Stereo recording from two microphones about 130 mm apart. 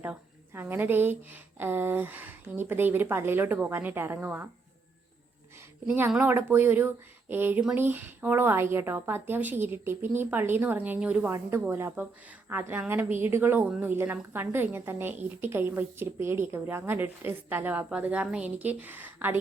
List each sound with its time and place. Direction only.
0.0 s a woman's voice: 15° right (ahead or behind)
6.1 s a woman's voice: 15° right (ahead or behind)